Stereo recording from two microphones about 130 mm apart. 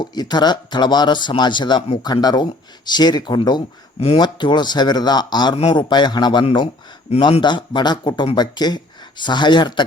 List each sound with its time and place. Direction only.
0.0 s speech: 35° left (ahead or behind)